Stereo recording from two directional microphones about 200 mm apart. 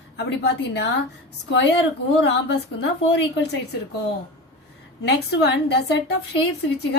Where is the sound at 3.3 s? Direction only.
60° left (ahead or behind).